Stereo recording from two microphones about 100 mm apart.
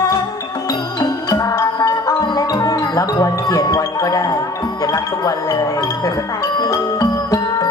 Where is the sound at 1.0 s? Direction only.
40° left (ahead or behind).